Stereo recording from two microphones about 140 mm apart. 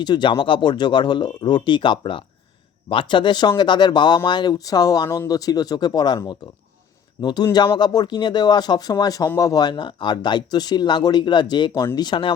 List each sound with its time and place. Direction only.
0.0 s speech: 30° left (ahead or behind)